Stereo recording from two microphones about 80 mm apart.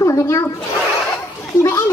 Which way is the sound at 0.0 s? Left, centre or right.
Left.